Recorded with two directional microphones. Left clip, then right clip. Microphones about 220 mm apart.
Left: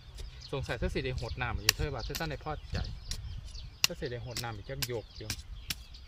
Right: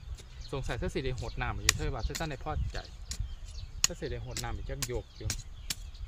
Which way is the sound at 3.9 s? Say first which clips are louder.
Left 1 dB; centre (ahead or behind).